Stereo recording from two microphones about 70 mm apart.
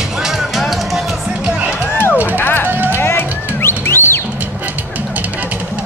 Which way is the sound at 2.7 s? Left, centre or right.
Right.